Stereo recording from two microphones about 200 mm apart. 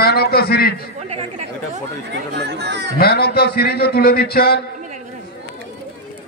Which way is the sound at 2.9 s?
50° left (ahead or behind).